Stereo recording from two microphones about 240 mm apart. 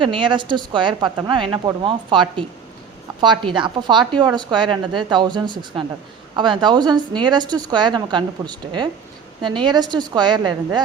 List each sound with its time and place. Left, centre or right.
0.0 s a woman's voice: right